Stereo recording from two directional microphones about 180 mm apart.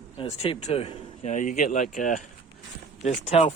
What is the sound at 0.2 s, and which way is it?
Speech, 30° left (ahead or behind).